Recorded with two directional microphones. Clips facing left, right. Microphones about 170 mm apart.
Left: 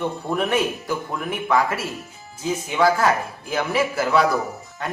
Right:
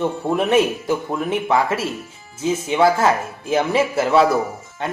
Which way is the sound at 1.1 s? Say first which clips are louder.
Right 1 dB; 25° right (ahead or behind).